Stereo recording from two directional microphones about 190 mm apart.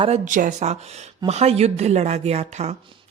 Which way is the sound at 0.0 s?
40° right (ahead or behind).